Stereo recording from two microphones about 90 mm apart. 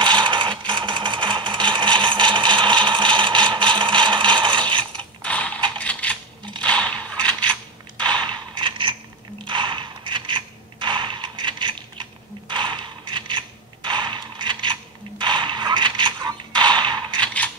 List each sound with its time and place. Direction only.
0.0 s sewing machine: 60° right (ahead or behind)
5.2 s mechanisms: 15° left (ahead or behind)
5.8 s coin: 15° left (ahead or behind)
6.6 s mechanisms: 10° left (ahead or behind)
8.0 s a sound: 60° right (ahead or behind)
17.2 s mechanisms: 15° left (ahead or behind)